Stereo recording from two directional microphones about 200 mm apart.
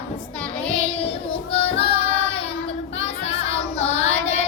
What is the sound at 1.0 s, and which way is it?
Child singing, 30° left (ahead or behind).